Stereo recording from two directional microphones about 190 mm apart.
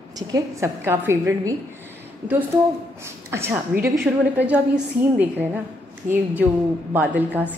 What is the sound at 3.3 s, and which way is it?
A woman's voice, 10° right (ahead or behind).